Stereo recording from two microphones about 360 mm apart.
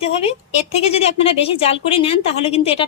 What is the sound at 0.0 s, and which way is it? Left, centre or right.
Speech, centre.